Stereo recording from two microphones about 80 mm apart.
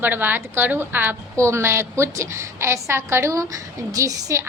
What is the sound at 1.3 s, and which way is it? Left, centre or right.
A woman's voice, right.